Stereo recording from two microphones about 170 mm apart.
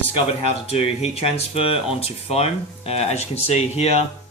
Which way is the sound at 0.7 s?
35° left (ahead or behind).